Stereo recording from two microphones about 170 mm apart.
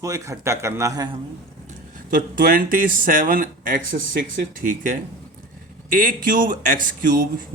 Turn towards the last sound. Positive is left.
turn(degrees=-55)  # may be behind; listen again after turning